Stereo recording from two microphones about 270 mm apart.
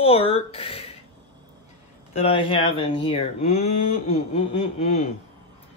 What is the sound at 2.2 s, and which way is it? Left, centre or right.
Speech, centre.